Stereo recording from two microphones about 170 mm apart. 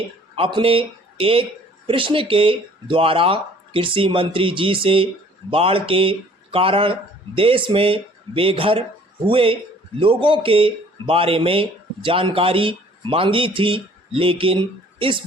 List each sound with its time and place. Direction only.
0.3 s speech: 30° right (ahead or behind)